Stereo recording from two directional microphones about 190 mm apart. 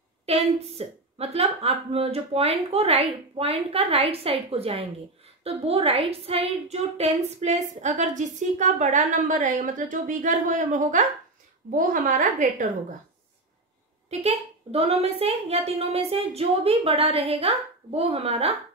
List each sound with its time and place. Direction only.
0.3 s a woman's voice: 30° right (ahead or behind)
14.2 s a woman's voice: 35° right (ahead or behind)